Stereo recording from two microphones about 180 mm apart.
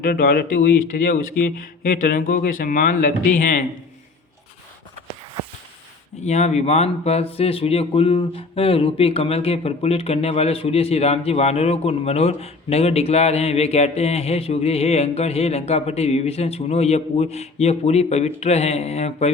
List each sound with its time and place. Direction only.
0.0 s speech: 55° left (ahead or behind)
6.2 s speech: 40° left (ahead or behind)